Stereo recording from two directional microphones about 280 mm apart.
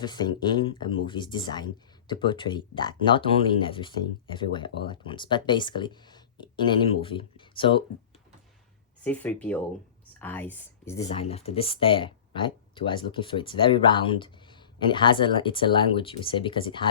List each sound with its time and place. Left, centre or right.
0.0 s speech: centre
9.0 s speech: centre
11.0 s speech: left